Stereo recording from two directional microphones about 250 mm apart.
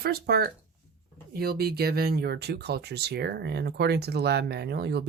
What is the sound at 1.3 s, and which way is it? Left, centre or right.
Speech, right.